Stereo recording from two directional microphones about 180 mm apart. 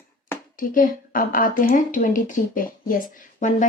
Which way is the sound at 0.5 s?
50° left (ahead or behind).